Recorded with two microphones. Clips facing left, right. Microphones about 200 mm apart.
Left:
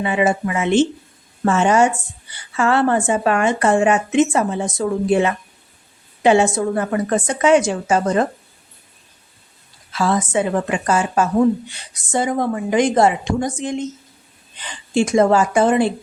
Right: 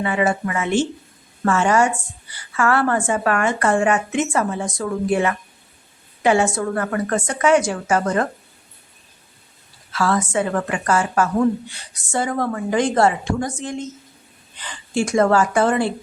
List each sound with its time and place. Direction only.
0.0 s a woman's voice: 20° left (ahead or behind)
9.9 s a woman's voice: 20° left (ahead or behind)